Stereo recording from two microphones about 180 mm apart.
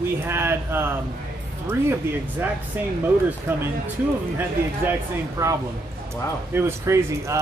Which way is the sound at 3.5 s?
15° right (ahead or behind).